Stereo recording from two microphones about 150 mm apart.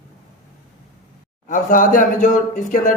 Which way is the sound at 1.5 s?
60° left (ahead or behind).